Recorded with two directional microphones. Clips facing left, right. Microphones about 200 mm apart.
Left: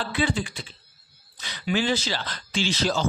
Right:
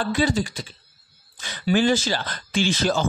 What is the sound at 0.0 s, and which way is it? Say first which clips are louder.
Speech: right 4 dB; 40° right (ahead or behind).